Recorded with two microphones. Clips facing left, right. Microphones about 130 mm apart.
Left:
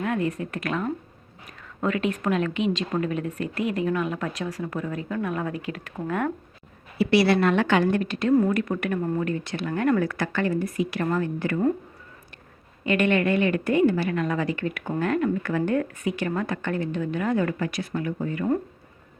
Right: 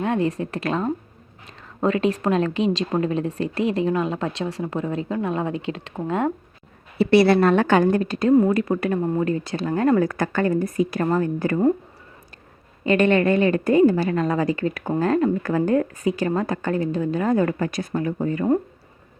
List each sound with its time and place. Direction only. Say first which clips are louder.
0.0 s a woman's voice: right 4 dB; 30° right (ahead or behind)
7.1 s a woman's voice: right 5 dB; 50° right (ahead or behind)
8.3 s a woman's voice: right 4 dB; 30° right (ahead or behind)
10.0 s a woman's voice: right 4 dB; 45° right (ahead or behind)
12.8 s a woman's voice: right 4 dB; 40° right (ahead or behind)